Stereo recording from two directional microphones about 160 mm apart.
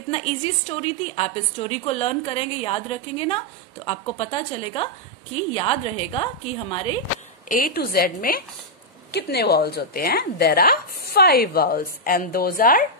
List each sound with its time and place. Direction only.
0.1 s a woman's voice: 35° left (ahead or behind)
7.4 s a woman's voice: 65° left (ahead or behind)
9.1 s a woman's voice: 85° left; by 12.8 s 60° left (ahead or behind)